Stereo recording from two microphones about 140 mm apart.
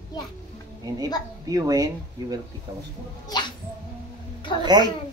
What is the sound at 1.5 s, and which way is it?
Speech, 25° right (ahead or behind).